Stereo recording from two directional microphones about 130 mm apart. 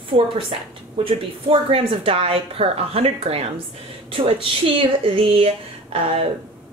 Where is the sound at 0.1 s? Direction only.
40° right (ahead or behind).